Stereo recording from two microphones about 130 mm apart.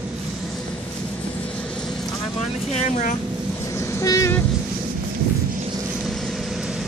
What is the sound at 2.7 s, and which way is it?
Vehicle, 65° left (ahead or behind).